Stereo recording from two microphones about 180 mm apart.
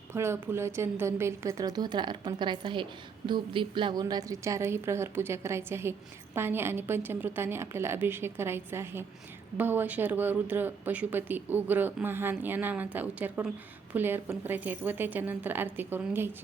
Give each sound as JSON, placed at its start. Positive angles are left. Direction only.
{"t": 0.1, "sound": "speech", "side_deg": -15}